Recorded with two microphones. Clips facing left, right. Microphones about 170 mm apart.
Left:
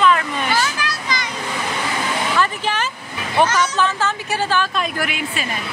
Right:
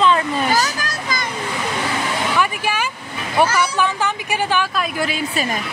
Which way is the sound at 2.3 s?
10° right (ahead or behind).